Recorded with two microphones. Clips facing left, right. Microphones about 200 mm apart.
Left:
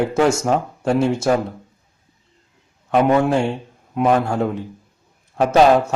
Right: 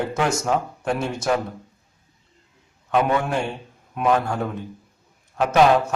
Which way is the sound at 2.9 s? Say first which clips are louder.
Left 5 dB; 25° left (ahead or behind).